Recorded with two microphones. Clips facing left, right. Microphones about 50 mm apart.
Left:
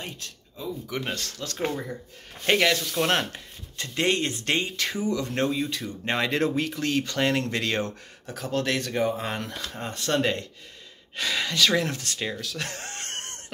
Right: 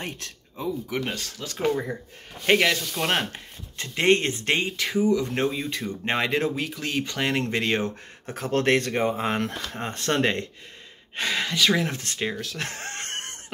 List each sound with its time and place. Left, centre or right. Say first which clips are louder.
0.0 s a sound: right 3 dB; right
0.8 s speech: right 2 dB; centre; by 4.7 s right
4.7 s speech: right 5 dB; centre
6.3 s speech: left 1 dB; centre; by 7.9 s right
8.3 s speech: right 5 dB; right
11.1 s speech: right 1 dB; right
11.5 s speech: even; centre; by 13.4 s right